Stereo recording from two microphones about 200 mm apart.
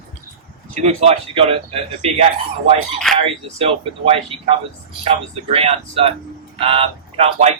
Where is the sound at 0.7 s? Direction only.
35° right (ahead or behind).